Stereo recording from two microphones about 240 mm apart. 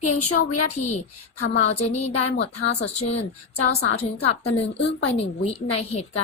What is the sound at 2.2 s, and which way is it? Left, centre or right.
Speech, left.